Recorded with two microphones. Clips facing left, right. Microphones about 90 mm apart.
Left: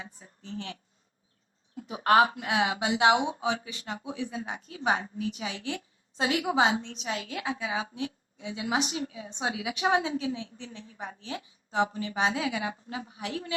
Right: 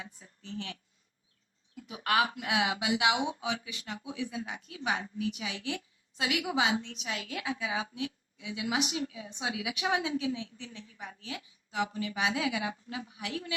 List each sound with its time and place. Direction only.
0.0 s a woman's voice: 35° left (ahead or behind)